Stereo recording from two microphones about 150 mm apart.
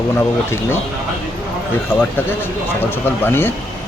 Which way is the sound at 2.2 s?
15° left (ahead or behind).